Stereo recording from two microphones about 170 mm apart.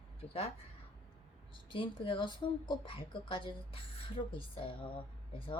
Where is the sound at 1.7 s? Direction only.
30° left (ahead or behind).